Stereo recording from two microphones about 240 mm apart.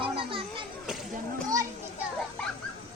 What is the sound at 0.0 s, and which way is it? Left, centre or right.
Children playing, right.